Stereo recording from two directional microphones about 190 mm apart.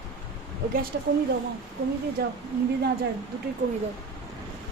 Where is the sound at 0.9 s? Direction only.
55° right (ahead or behind).